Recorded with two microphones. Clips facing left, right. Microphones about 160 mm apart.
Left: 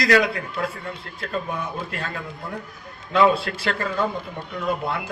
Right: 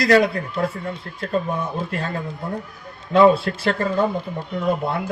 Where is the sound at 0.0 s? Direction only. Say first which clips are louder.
Right 3 dB; 35° right (ahead or behind).